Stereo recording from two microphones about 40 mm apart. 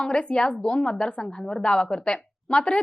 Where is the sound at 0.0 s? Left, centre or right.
Left.